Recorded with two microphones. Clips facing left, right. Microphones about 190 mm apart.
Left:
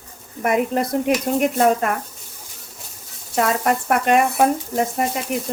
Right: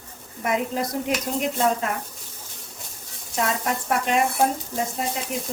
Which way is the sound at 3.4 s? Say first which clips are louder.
Left 6 dB; 60° left (ahead or behind).